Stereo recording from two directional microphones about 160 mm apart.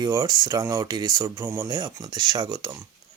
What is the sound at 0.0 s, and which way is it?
Speech, 25° right (ahead or behind).